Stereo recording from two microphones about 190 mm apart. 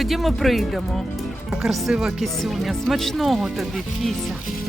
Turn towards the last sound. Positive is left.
turn(degrees=0)  # may be behind; listen again after turning